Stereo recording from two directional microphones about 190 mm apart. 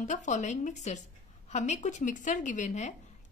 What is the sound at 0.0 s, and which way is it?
Speech, 40° left (ahead or behind).